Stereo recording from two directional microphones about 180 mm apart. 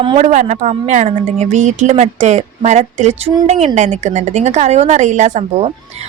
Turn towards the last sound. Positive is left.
turn(degrees=-35)  # may be behind; listen again after turning